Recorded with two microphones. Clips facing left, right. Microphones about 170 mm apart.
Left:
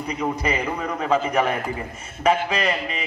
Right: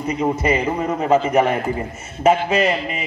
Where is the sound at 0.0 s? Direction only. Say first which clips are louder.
Right 5 dB; 25° right (ahead or behind).